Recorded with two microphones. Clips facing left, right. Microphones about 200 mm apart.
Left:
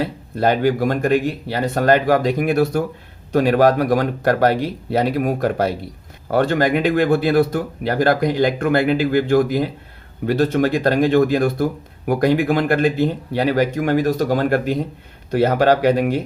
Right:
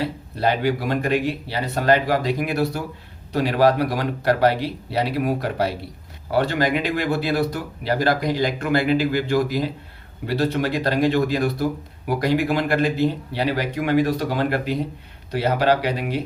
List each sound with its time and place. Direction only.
0.0 s speech: 50° left (ahead or behind)